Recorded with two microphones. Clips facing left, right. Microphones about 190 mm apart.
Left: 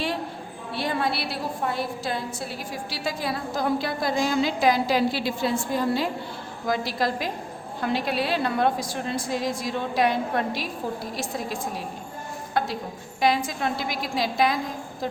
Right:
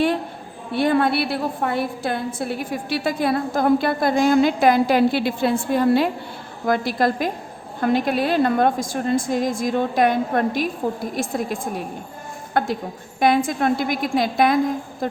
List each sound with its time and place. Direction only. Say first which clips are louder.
0.7 s a woman's voice: right 8 dB; 55° right (ahead or behind)